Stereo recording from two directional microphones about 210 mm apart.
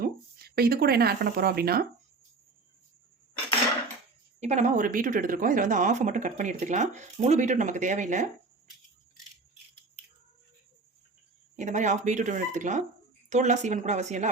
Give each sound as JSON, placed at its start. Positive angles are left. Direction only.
{"t": 0.0, "sound": "speech", "side_deg": -45}
{"t": 4.4, "sound": "speech", "side_deg": -35}
{"t": 11.5, "sound": "speech", "side_deg": -35}